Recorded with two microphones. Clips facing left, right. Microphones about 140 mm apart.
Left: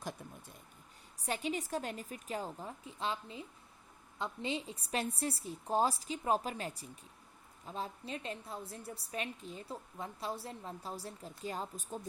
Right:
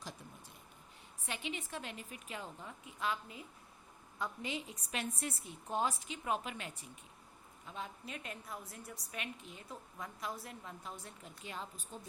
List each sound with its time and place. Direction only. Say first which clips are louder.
1.2 s a woman's voice: left 6 dB; 40° left (ahead or behind)